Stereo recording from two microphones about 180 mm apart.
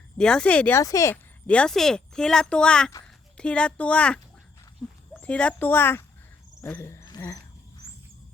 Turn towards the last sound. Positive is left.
turn(degrees=15)  # may be behind; listen again after turning